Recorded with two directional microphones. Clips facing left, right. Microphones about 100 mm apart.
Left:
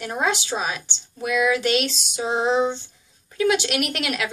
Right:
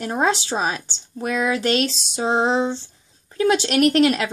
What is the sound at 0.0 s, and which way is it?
A woman's voice, 35° right (ahead or behind).